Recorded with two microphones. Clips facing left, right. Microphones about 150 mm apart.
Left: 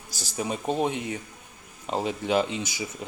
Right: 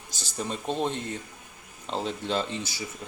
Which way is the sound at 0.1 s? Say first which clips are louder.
Left 3 dB; 10° left (ahead or behind).